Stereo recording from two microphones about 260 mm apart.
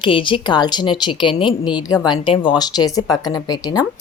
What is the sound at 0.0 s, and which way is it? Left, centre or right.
A woman's voice, centre.